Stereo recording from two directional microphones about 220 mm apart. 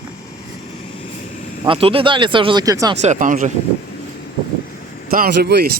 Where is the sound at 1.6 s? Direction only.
25° right (ahead or behind).